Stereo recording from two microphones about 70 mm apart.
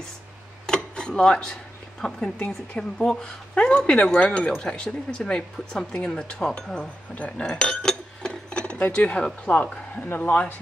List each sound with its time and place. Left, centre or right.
0.7 s speech: centre
10.0 s speech: left